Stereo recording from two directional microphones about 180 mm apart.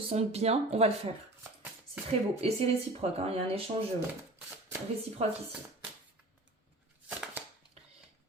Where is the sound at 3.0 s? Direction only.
35° right (ahead or behind).